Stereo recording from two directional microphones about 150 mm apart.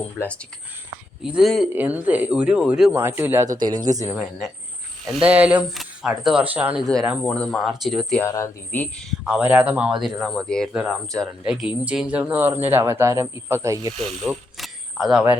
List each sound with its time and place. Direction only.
0.2 s speech: 10° left (ahead or behind)
1.2 s speech: centre (ahead or behind)
1.7 s speech: 10° right (ahead or behind)
6.7 s speech: 5° left (ahead or behind)
8.2 s speech: 20° left (ahead or behind)
9.2 s speech: 10° right (ahead or behind)
10.0 s speech: centre (ahead or behind); by 13.9 s 20° right (ahead or behind)
14.0 s speech: centre (ahead or behind)